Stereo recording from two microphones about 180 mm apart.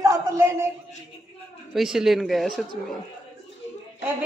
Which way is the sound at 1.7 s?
5° right (ahead or behind).